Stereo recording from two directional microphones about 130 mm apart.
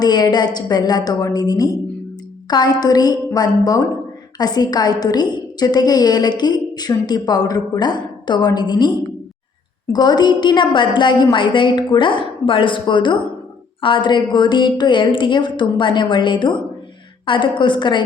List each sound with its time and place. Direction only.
0.0 s a woman's voice: 30° left (ahead or behind)